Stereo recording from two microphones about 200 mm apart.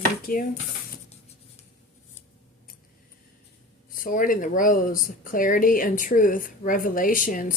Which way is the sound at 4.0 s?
45° left (ahead or behind).